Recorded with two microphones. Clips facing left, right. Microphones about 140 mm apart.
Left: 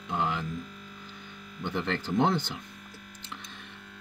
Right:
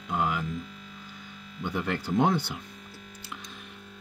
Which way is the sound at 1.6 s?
10° right (ahead or behind).